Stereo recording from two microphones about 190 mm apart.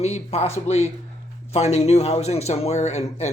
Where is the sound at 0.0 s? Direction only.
35° left (ahead or behind).